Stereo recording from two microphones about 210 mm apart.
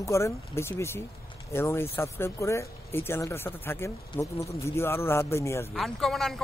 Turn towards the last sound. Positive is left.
turn(degrees=0)  # may be behind; listen again after turning